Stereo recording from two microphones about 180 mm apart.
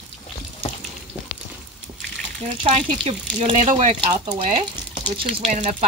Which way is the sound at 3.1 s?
40° right (ahead or behind).